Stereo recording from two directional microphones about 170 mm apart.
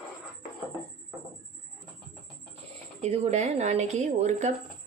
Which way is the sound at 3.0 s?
40° right (ahead or behind).